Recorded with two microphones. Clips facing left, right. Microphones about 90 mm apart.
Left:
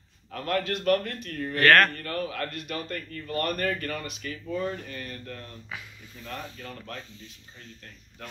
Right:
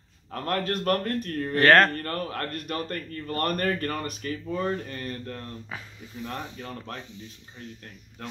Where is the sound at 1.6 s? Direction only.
25° right (ahead or behind).